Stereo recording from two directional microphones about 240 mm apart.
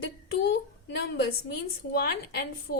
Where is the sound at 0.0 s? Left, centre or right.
Left.